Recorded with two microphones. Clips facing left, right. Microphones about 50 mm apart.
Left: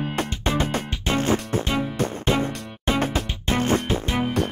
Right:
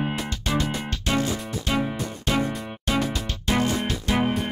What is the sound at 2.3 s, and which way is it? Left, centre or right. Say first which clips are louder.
Music: even; left.